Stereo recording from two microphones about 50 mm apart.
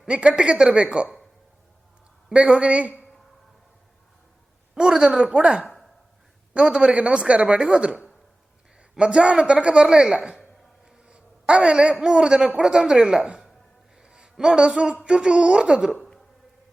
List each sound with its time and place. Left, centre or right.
0.1 s speech: right
2.3 s speech: right
4.7 s speech: centre
5.6 s a sound: centre
6.5 s a man's voice: right
14.0 s a sound: centre
15.0 s speech: right